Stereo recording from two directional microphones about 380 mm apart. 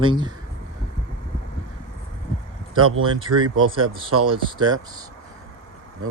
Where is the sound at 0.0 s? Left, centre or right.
Centre.